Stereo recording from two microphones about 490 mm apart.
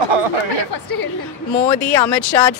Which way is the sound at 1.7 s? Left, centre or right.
Centre.